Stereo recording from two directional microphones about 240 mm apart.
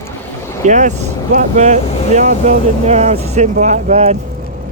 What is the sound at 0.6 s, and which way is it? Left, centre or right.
Speech, right.